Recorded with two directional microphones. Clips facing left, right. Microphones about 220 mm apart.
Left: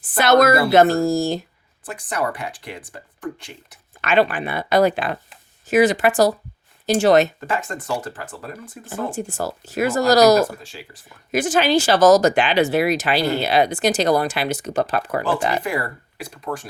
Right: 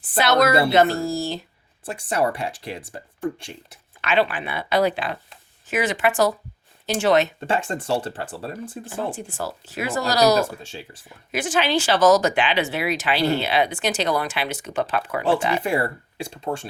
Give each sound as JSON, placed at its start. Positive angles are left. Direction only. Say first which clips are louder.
{"t": 0.2, "sound": "speech", "louder": "left 3 dB", "side_deg": 45}
{"t": 1.8, "sound": "speech", "louder": "right 2 dB", "side_deg": -25}
{"t": 4.0, "sound": "speech", "louder": "left 3 dB", "side_deg": 45}
{"t": 7.3, "sound": "speech", "louder": "right 2 dB", "side_deg": -30}
{"t": 8.9, "sound": "speech", "louder": "left 4 dB", "side_deg": 45}
{"t": 10.6, "sound": "speech", "louder": "right 2 dB", "side_deg": -25}
{"t": 11.3, "sound": "speech", "louder": "left 5 dB", "side_deg": 40}
{"t": 15.6, "sound": "speech", "louder": "right 2 dB", "side_deg": -30}